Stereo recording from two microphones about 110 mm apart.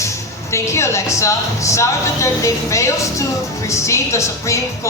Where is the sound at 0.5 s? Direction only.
25° left (ahead or behind).